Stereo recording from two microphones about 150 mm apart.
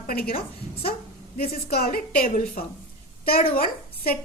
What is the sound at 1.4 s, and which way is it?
A woman's voice, 90° left.